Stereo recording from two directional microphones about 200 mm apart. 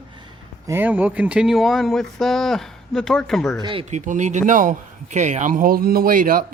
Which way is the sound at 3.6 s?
25° right (ahead or behind).